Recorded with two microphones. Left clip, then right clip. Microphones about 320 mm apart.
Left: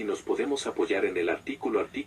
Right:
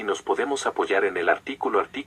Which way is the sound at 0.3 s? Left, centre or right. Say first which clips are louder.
Right 4 dB; right.